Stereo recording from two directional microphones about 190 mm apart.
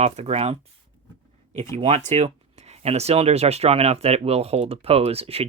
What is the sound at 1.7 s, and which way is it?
Speech, 30° right (ahead or behind).